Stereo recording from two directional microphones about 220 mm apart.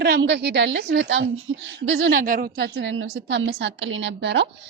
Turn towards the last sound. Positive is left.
turn(degrees=-55)  # may be behind; listen again after turning